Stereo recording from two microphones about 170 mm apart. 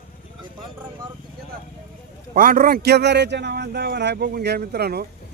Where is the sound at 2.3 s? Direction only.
55° right (ahead or behind).